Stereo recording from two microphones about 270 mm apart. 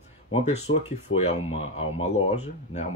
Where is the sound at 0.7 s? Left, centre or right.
Left.